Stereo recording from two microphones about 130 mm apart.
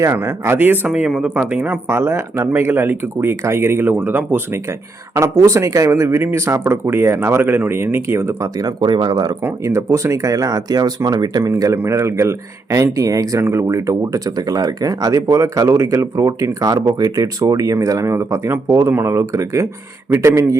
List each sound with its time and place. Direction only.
0.0 s speech: 20° right (ahead or behind)
9.4 s speech: 25° right (ahead or behind)